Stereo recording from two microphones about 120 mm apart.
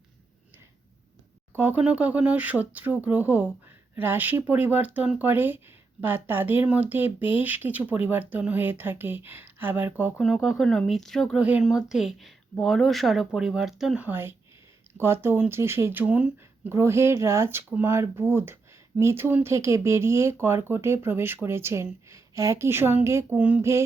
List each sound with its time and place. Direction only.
1.5 s speech: 15° right (ahead or behind)
10.2 s speech: centre (ahead or behind)
11.3 s speech: 10° right (ahead or behind)